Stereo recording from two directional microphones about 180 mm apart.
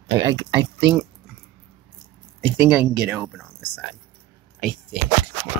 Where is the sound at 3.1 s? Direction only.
5° right (ahead or behind).